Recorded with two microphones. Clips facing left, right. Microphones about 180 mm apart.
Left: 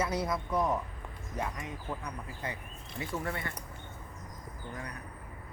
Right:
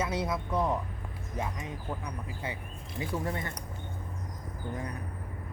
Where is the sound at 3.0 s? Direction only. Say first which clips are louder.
Right 3 dB; 20° right (ahead or behind).